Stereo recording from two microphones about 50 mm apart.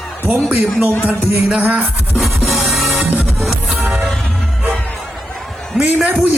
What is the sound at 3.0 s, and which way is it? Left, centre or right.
Music, right.